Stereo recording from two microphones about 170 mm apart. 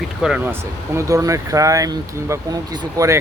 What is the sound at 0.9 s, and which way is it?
Speech, 20° right (ahead or behind).